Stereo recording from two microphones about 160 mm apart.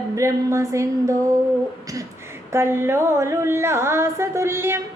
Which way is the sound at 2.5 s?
15° right (ahead or behind).